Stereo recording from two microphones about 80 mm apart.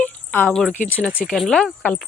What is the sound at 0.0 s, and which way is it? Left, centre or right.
Cricket, centre.